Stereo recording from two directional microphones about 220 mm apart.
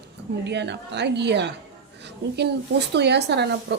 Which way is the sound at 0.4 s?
50° right (ahead or behind).